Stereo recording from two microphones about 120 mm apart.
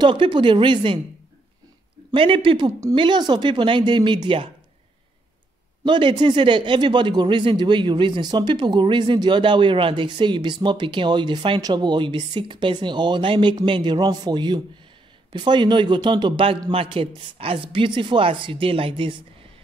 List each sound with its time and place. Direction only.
0.0 s speech: 40° right (ahead or behind)
2.1 s speech: 45° right (ahead or behind)
5.9 s speech: 40° right (ahead or behind)